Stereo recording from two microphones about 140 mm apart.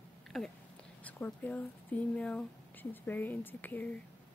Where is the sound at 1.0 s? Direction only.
10° left (ahead or behind).